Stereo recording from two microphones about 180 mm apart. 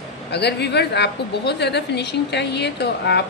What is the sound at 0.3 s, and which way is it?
A woman's voice, 65° left (ahead or behind).